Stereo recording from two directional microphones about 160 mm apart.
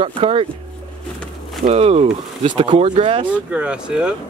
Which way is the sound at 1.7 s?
40° right (ahead or behind).